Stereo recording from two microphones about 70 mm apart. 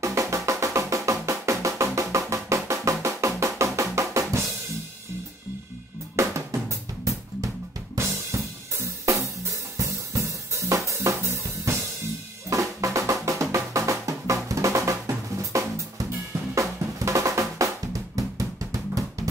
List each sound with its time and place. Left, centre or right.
0.0 s percussion: right
6.2 s drum kit: right
12.4 s drum: right